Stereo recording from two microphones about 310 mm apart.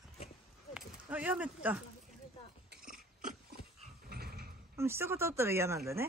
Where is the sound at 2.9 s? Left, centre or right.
Right.